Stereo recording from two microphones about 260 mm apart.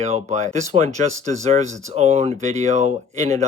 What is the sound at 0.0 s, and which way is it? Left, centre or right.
Speech, right.